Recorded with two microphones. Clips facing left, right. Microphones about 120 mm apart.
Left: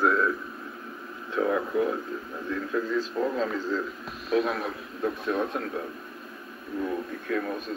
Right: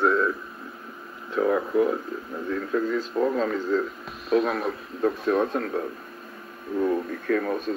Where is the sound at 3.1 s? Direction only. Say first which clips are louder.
Right 7 dB; 10° right (ahead or behind).